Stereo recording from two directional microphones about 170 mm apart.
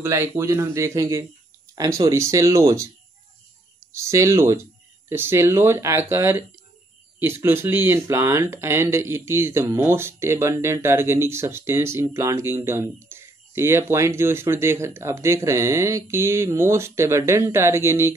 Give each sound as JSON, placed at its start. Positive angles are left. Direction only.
{"t": 0.0, "sound": "speech", "side_deg": -15}
{"t": 3.9, "sound": "speech", "side_deg": -15}